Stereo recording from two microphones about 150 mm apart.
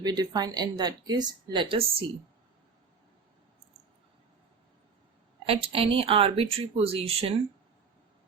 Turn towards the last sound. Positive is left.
turn(degrees=-40)  # may be behind; listen again after turning